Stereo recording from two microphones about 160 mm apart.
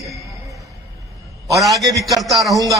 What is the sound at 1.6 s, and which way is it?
A man's voice, centre (ahead or behind).